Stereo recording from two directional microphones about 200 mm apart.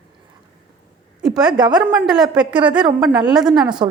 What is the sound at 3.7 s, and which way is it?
Speech, 20° right (ahead or behind).